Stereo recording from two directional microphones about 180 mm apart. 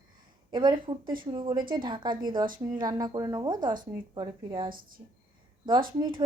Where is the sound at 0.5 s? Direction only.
25° right (ahead or behind).